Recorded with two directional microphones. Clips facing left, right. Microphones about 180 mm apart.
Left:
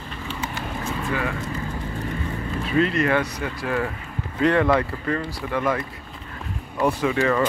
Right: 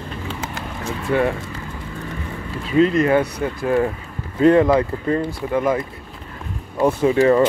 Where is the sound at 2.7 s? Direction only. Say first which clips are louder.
Right 6 dB; 25° right (ahead or behind).